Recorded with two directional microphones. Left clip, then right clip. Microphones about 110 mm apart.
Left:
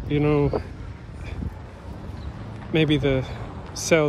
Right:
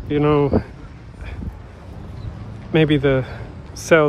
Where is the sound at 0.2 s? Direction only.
60° right (ahead or behind).